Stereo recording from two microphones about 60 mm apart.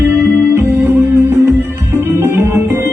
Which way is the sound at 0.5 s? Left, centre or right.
Right.